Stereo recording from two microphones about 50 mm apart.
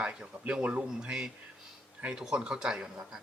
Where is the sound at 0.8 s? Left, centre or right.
Centre.